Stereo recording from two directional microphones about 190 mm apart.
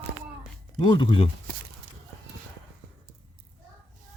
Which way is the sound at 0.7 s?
25° left (ahead or behind).